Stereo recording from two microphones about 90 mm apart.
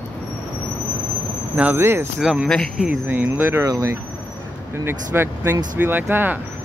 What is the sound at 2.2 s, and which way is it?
Speech, 5° right (ahead or behind).